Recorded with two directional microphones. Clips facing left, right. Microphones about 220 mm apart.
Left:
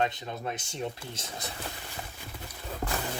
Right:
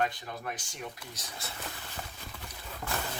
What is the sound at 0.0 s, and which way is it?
Speech, 25° left (ahead or behind).